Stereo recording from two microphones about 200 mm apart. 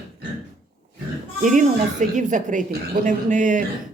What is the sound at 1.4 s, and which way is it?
Speech, 40° right (ahead or behind).